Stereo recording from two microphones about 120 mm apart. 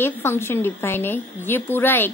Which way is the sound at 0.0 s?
20° left (ahead or behind).